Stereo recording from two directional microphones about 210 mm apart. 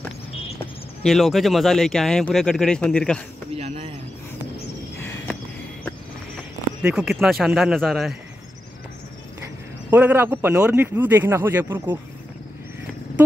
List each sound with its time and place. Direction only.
1.0 s speech: centre (ahead or behind)
3.5 s a sound: 30° right (ahead or behind)
6.8 s speech: 5° right (ahead or behind)
9.8 s speech: 5° right (ahead or behind)